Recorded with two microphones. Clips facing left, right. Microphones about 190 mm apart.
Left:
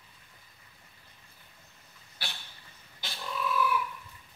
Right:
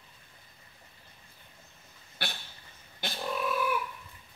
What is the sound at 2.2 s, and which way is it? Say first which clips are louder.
Dog: right 5 dB; 55° right (ahead or behind).